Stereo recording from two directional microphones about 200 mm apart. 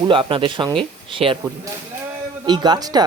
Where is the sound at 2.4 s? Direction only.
20° right (ahead or behind).